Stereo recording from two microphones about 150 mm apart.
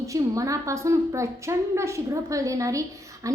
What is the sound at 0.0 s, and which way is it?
A woman's voice, 20° right (ahead or behind).